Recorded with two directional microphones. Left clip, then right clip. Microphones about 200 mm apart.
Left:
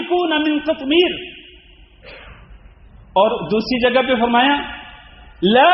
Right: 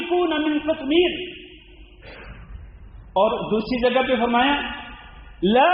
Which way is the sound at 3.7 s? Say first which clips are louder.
Left 4 dB; 25° left (ahead or behind).